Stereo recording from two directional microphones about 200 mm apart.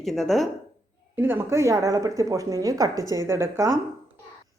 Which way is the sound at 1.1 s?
10° right (ahead or behind).